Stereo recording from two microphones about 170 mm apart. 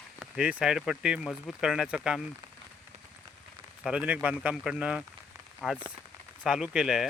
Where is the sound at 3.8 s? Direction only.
5° right (ahead or behind).